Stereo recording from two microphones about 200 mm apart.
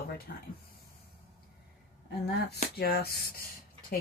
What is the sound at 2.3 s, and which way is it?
Speech, 55° left (ahead or behind).